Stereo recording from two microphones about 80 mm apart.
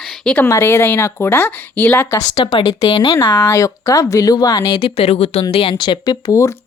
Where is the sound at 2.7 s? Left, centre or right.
Left.